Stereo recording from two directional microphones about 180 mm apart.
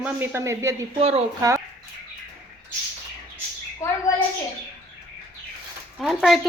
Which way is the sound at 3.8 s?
15° left (ahead or behind).